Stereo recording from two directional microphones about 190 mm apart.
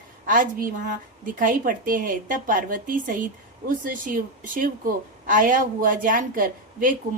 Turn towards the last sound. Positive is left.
turn(degrees=-45)  # may be behind; listen again after turning